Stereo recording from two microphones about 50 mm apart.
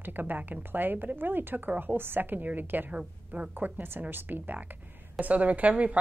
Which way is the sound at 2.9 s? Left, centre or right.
Right.